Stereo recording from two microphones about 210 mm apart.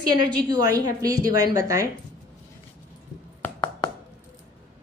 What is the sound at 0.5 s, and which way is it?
A woman's voice, 20° right (ahead or behind).